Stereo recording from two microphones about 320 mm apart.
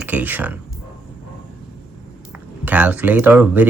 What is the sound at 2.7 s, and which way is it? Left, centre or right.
Speech, centre.